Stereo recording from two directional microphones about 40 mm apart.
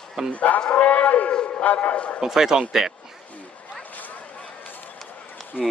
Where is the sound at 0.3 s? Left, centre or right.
Left.